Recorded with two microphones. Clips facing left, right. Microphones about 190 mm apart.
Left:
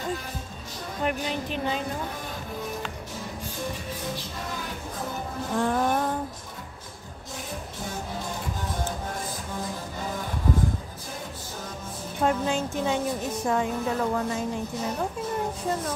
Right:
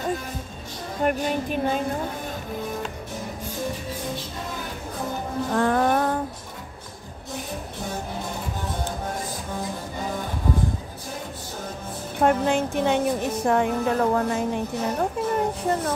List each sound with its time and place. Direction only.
1.0 s speech: 50° right (ahead or behind)
5.5 s music: 70° right (ahead or behind)
12.2 s a woman's voice: 60° right (ahead or behind)